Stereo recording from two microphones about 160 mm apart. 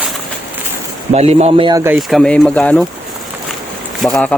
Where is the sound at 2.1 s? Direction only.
Centre (ahead or behind).